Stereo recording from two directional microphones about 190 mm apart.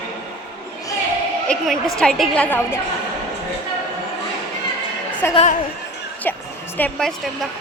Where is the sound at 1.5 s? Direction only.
5° left (ahead or behind).